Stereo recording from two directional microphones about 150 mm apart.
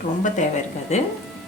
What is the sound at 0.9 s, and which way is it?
Speech, 50° left (ahead or behind).